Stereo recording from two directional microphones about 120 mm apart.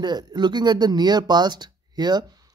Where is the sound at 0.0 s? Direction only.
35° right (ahead or behind).